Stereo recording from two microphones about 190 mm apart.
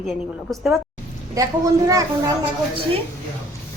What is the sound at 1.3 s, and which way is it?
Speech, 20° right (ahead or behind).